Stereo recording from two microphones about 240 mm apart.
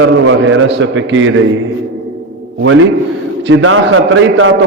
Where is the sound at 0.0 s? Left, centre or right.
Right.